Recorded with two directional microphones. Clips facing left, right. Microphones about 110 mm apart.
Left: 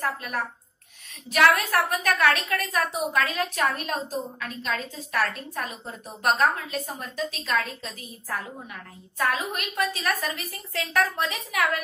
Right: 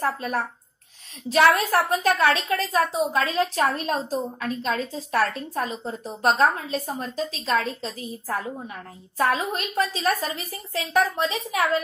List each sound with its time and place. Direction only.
0.0 s a woman's voice: 35° right (ahead or behind)